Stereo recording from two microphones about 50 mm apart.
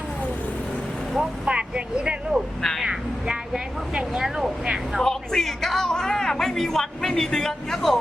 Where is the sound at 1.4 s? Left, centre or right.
Right.